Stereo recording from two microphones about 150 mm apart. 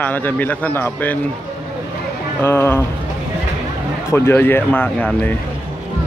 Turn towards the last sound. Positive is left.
turn(degrees=10)  # may be behind; listen again after turning